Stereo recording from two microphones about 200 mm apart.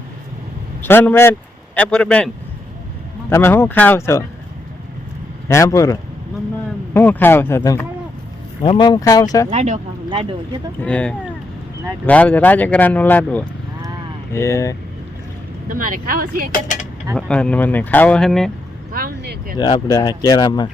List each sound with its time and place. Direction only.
0.8 s speech: 10° left (ahead or behind)
5.5 s speech: 15° left (ahead or behind)
9.5 s speech: 35° right (ahead or behind)
10.1 s speech: 25° right (ahead or behind)
10.8 s speech: 5° left (ahead or behind)
15.7 s speech: 45° right (ahead or behind)
16.5 s speech: 40° left (ahead or behind)
17.2 s speech: 5° left (ahead or behind)
18.9 s vehicle: 50° right (ahead or behind)
19.5 s speech: 20° left (ahead or behind)